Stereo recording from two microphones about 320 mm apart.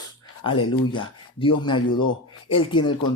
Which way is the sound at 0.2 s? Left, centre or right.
Centre.